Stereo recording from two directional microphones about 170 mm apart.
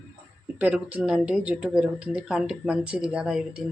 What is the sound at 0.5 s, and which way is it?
Speech, 10° right (ahead or behind).